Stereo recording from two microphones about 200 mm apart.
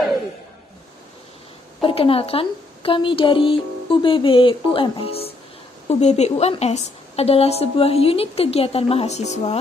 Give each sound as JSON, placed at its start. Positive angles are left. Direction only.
{"t": 1.8, "sound": "a woman's voice", "side_deg": 25}